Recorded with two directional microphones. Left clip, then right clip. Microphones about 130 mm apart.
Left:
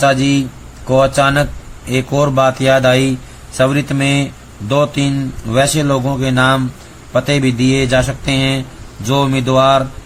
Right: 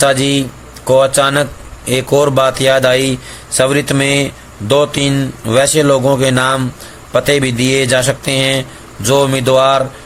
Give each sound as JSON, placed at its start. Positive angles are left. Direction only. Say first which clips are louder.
{"t": 0.0, "sound": "a man's voice", "louder": "right 1 dB", "side_deg": -50}